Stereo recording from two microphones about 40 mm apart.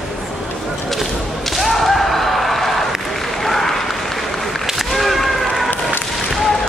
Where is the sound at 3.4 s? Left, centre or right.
Centre.